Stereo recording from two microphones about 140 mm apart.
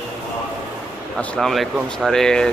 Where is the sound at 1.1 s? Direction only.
5° left (ahead or behind).